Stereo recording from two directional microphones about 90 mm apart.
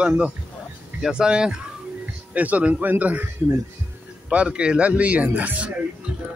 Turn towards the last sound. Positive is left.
turn(degrees=-15)  # may be behind; listen again after turning